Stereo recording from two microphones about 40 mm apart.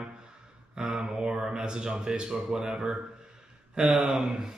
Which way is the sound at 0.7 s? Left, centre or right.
Right.